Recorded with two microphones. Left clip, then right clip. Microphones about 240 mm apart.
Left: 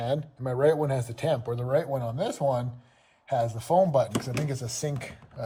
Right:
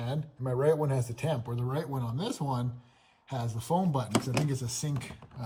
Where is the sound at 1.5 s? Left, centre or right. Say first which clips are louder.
Left 9 dB; left.